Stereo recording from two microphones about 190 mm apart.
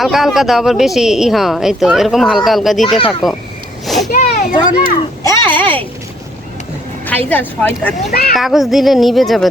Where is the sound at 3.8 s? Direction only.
Centre (ahead or behind).